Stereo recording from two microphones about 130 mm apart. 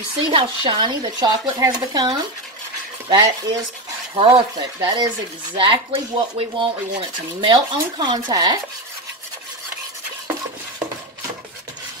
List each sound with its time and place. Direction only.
0.3 s speech: 40° right (ahead or behind)